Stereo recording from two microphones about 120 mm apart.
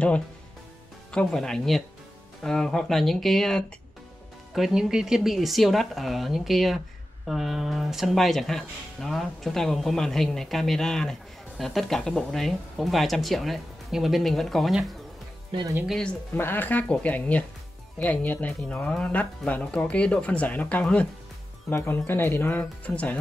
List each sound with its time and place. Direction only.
1.1 s speech: 5° left (ahead or behind)